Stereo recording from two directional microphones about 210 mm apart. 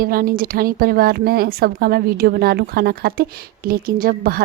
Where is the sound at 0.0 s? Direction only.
45° right (ahead or behind).